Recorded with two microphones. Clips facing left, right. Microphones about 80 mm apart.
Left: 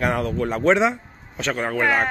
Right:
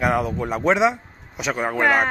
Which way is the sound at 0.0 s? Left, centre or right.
Centre.